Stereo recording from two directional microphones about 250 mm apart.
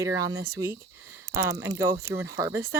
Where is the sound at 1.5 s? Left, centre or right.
Centre.